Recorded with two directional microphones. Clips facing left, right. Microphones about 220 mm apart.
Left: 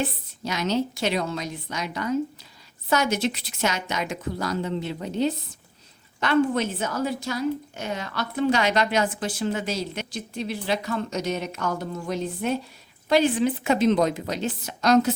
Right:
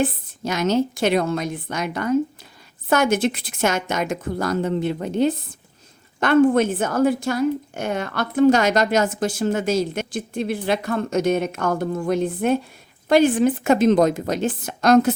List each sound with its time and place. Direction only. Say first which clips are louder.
0.0 s a woman's voice: right 6 dB; 50° right (ahead or behind)